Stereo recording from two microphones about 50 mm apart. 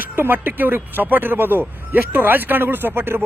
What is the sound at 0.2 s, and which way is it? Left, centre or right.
Speech, right.